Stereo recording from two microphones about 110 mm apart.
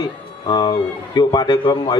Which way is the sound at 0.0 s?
40° left (ahead or behind).